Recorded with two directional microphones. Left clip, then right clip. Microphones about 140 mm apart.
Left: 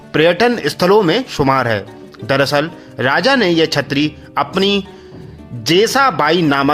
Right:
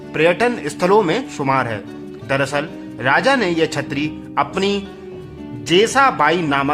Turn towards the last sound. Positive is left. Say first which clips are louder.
# left 3 dB
turn(degrees=45)  # may be behind; listen again after turning